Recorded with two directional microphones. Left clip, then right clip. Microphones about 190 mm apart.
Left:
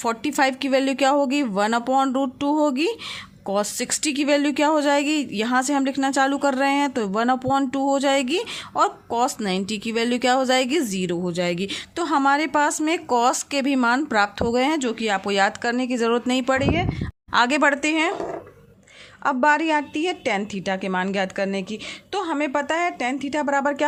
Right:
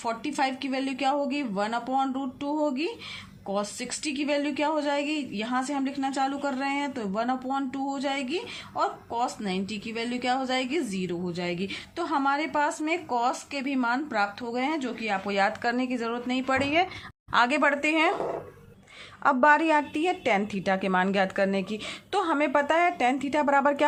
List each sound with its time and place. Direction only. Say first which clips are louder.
0.0 s speech: left 7 dB; 50° left (ahead or behind)
16.6 s a woman's voice: left 2 dB; 20° left (ahead or behind)
17.3 s a woman's voice: left 4 dB; 35° left (ahead or behind)
19.2 s a woman's voice: left 1 dB; 15° left (ahead or behind)